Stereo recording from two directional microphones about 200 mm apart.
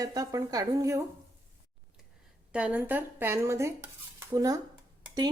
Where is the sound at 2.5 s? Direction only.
5° right (ahead or behind).